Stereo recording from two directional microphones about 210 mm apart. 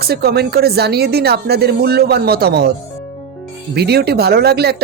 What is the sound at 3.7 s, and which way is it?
Speech, 50° right (ahead or behind).